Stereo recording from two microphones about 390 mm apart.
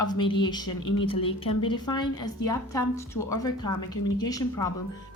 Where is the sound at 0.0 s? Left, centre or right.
Centre.